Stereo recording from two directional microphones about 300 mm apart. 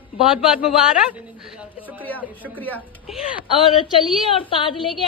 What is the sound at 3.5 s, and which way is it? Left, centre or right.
A woman's voice, centre.